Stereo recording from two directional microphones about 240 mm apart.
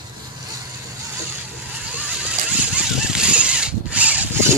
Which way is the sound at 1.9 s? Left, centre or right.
Centre.